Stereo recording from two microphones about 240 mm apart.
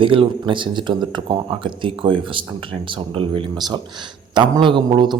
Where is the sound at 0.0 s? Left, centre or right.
Right.